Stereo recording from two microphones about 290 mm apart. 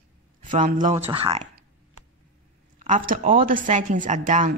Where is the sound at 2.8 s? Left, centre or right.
Right.